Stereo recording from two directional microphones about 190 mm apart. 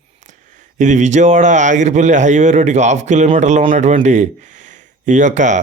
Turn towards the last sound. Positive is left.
turn(degrees=-40)  # may be behind; listen again after turning